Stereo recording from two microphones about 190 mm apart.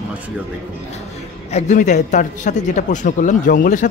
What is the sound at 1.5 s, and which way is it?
Speech, 40° left (ahead or behind).